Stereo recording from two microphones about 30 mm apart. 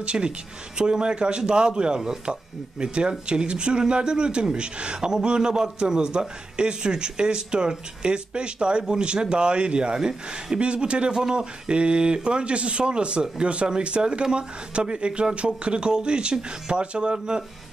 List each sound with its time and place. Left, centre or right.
0.0 s a man's voice: right
9.9 s a man's voice: right
10.6 s speech: right
11.1 s speech: right